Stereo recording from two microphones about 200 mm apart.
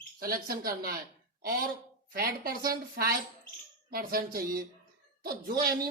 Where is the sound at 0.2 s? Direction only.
45° right (ahead or behind).